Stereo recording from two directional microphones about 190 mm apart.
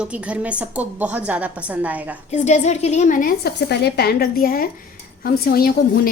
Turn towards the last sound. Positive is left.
turn(degrees=50)  # may be behind; listen again after turning